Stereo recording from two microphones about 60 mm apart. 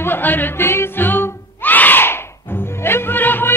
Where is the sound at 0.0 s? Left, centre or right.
Left.